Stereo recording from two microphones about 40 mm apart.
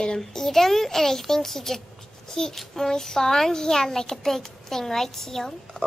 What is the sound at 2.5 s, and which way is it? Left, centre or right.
A child's voice, centre.